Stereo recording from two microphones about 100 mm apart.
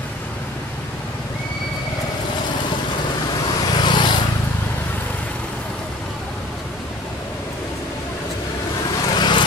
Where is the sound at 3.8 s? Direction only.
50° left (ahead or behind).